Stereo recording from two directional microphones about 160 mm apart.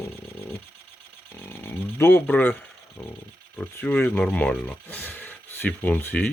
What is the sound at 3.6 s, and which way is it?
Speech, 10° left (ahead or behind).